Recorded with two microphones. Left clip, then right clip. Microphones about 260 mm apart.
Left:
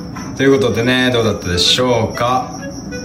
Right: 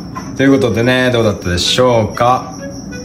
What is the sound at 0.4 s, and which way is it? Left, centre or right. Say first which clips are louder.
Speech: right 1 dB; centre.